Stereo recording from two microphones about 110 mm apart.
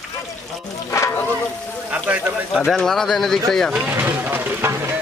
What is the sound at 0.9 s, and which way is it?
Speech, 25° left (ahead or behind).